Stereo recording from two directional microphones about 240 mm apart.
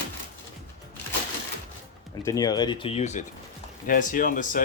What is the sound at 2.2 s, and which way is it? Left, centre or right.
Speech, centre.